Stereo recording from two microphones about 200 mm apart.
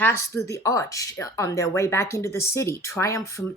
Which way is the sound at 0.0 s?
15° left (ahead or behind).